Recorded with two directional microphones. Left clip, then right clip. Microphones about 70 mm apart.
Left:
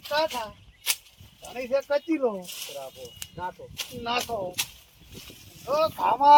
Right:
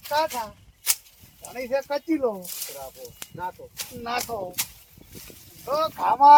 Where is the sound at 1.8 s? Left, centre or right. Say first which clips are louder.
Even; right.